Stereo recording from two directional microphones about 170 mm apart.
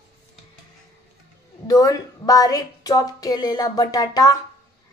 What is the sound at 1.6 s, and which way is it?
A woman's voice, 20° left (ahead or behind).